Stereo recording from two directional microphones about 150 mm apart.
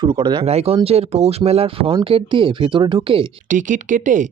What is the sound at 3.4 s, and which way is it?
Speech, 60° right (ahead or behind).